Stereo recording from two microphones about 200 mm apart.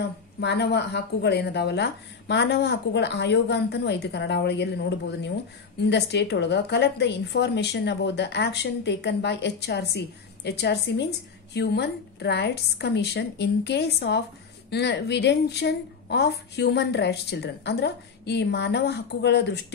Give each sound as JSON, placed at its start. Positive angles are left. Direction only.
{"t": 0.4, "sound": "a woman's voice", "side_deg": 60}